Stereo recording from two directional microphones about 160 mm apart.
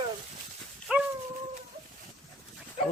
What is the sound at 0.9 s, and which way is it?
Dog, 5° right (ahead or behind).